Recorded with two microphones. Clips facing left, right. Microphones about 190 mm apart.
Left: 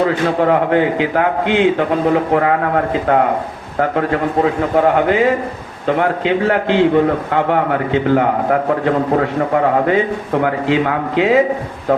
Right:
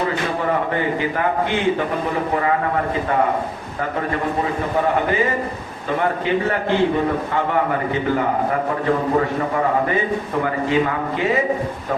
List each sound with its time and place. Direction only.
0.0 s a man's voice: 65° left (ahead or behind)
3.8 s a man's voice: 70° left (ahead or behind)
6.0 s a man's voice: 85° left